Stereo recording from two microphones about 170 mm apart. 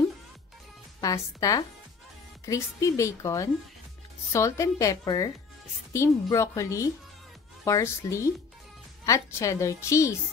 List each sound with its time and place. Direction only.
1.0 s a woman's voice: 20° left (ahead or behind)